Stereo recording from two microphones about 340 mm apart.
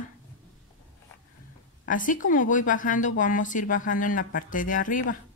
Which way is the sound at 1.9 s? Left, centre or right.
Left.